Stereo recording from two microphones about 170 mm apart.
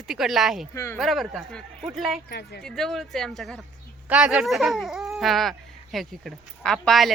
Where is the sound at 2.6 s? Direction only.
Centre (ahead or behind).